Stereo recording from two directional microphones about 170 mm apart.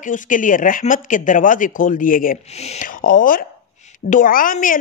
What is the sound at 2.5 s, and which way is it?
A woman's voice, 40° left (ahead or behind).